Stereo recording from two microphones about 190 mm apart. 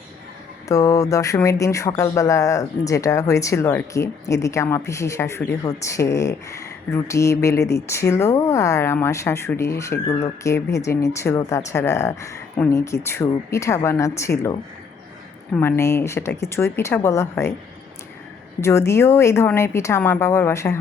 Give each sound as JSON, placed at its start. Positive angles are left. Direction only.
{"t": 0.7, "sound": "speech", "side_deg": 15}
{"t": 15.5, "sound": "speech", "side_deg": 10}
{"t": 18.6, "sound": "speech", "side_deg": 15}